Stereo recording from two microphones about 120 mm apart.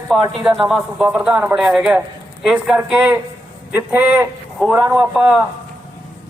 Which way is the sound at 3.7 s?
15° right (ahead or behind).